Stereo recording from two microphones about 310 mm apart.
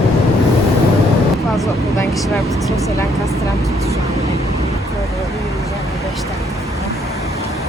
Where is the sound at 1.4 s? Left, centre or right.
Centre.